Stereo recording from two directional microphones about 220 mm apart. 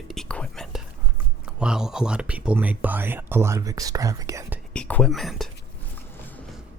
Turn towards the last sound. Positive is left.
turn(degrees=0)  # may be behind; listen again after turning